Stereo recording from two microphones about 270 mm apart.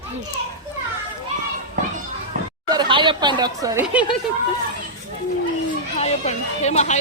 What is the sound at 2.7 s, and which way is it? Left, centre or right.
Speech, centre.